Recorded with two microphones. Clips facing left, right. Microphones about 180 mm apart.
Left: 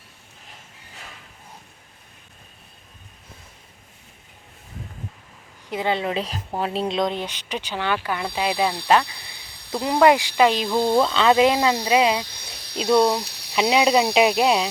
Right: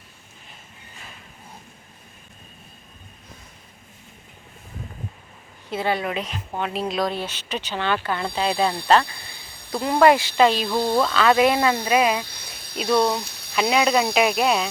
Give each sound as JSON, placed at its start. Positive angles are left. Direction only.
{"t": 5.6, "sound": "speech", "side_deg": 15}
{"t": 12.3, "sound": "snake", "side_deg": -50}
{"t": 12.9, "sound": "speech", "side_deg": 0}
{"t": 13.6, "sound": "speech", "side_deg": 25}